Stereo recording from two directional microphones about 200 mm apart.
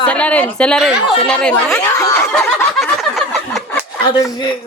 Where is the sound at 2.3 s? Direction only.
Centre (ahead or behind).